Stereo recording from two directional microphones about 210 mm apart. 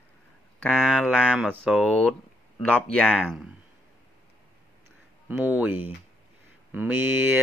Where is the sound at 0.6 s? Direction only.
Centre (ahead or behind).